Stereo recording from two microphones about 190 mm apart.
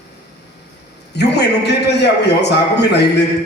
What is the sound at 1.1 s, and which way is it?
A man's voice, 60° left (ahead or behind).